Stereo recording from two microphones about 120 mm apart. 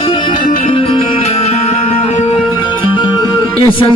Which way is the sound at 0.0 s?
50° left (ahead or behind).